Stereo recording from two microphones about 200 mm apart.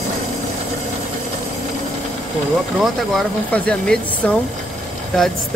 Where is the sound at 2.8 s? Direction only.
Centre (ahead or behind).